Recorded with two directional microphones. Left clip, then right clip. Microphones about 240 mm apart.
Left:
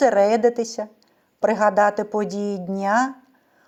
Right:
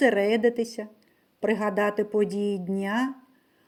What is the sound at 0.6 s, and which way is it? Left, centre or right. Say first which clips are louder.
Speech: left 4 dB; centre.